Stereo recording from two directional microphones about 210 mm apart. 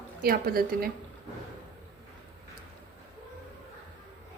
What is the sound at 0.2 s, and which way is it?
Speech, 45° right (ahead or behind).